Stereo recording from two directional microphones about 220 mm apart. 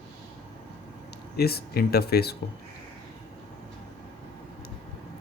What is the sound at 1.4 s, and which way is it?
Speech, 45° left (ahead or behind).